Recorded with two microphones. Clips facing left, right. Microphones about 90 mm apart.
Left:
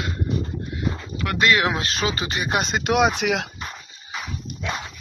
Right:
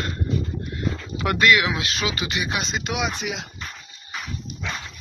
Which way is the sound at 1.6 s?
40° left (ahead or behind).